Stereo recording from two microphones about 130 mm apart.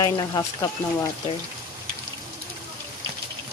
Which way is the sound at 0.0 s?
30° left (ahead or behind).